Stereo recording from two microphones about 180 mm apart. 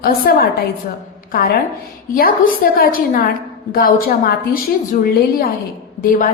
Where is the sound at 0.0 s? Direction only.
55° left (ahead or behind).